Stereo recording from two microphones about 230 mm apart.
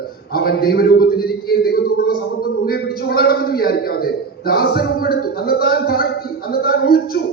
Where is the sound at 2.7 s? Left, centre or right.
Left.